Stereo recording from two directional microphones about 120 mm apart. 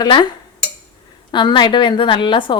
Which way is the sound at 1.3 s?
40° left (ahead or behind).